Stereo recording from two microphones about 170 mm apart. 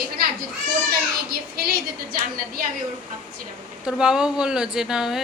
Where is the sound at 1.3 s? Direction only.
65° right (ahead or behind).